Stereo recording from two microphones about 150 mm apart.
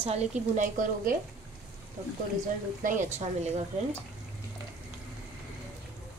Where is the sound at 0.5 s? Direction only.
60° right (ahead or behind).